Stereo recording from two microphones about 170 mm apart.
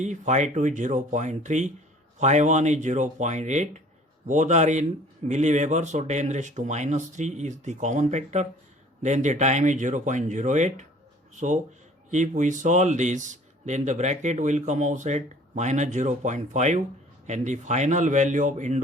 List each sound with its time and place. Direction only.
0.0 s speech: 45° right (ahead or behind)